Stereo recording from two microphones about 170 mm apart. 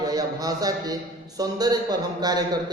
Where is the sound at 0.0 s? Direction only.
20° right (ahead or behind).